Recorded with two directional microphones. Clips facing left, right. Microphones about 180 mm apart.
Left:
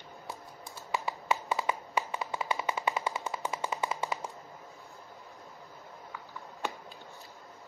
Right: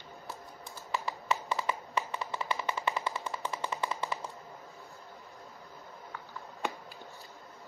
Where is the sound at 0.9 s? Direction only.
15° left (ahead or behind).